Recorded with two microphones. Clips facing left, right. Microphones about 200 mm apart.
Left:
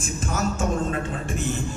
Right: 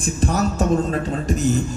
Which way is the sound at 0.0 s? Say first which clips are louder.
Right 6 dB; 35° right (ahead or behind).